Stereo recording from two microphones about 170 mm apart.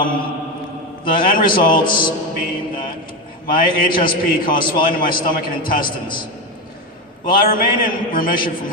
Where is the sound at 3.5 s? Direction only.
55° left (ahead or behind).